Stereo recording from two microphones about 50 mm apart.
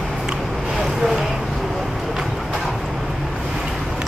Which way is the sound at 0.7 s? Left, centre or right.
Centre.